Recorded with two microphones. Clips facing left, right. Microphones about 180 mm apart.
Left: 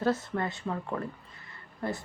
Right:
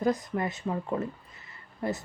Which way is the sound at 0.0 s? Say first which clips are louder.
Right 1 dB; 15° right (ahead or behind).